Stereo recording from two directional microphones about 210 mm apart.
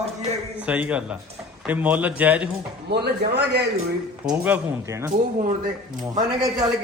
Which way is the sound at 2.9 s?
50° right (ahead or behind).